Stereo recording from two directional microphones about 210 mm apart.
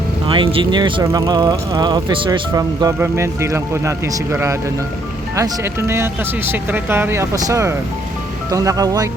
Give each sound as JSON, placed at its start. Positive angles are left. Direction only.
{"t": 0.3, "sound": "speech", "side_deg": -25}